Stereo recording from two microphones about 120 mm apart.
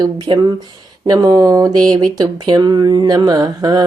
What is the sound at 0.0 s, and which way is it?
Speech, 40° right (ahead or behind).